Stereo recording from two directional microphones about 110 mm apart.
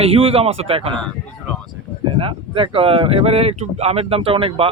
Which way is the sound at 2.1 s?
55° right (ahead or behind).